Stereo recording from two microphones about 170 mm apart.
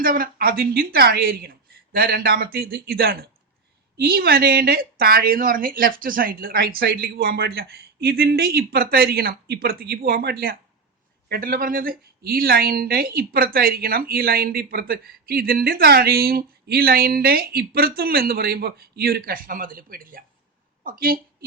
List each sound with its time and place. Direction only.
0.0 s speech: 60° right (ahead or behind)